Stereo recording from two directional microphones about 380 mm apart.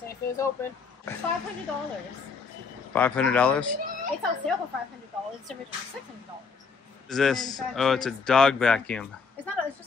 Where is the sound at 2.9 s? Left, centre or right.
Centre.